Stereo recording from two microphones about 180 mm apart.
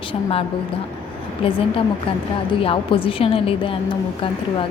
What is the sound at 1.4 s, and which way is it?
Speech, 30° left (ahead or behind).